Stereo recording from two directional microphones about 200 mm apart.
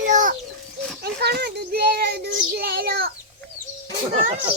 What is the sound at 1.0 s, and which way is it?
Child singing, 55° right (ahead or behind).